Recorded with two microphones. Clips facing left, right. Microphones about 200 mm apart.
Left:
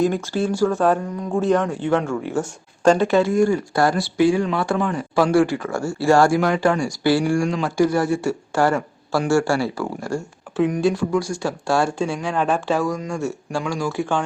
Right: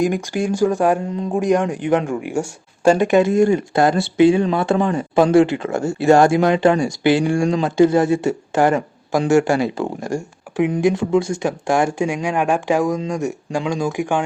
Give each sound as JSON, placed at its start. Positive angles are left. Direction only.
{"t": 0.0, "sound": "speech", "side_deg": -15}